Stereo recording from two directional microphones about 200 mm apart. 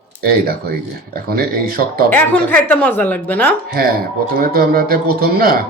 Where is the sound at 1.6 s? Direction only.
45° right (ahead or behind).